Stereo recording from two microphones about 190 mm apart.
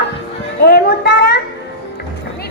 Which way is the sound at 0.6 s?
60° left (ahead or behind).